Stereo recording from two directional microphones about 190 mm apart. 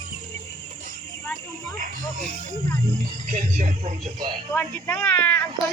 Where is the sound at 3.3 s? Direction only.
40° right (ahead or behind).